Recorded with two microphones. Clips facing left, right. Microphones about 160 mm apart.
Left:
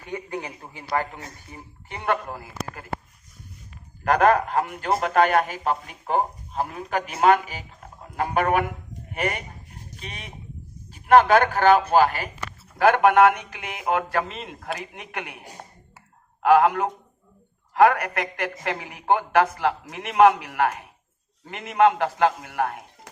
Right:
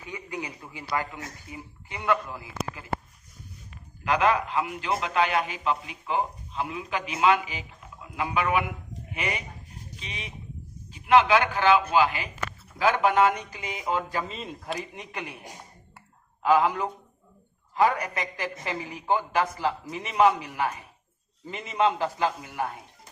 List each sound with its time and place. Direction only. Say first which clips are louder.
0.1 s a man's voice: left 4 dB; 55° left (ahead or behind)
4.0 s a man's voice: left 5 dB; 50° left (ahead or behind)
12.8 s a woman's voice: left 5 dB; 60° left (ahead or behind)
16.4 s a woman's voice: left 5 dB; 65° left (ahead or behind)